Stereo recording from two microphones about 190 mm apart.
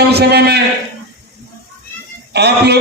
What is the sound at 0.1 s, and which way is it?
Speech, 60° right (ahead or behind).